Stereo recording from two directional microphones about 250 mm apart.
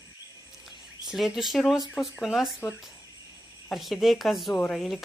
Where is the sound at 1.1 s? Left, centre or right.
Centre.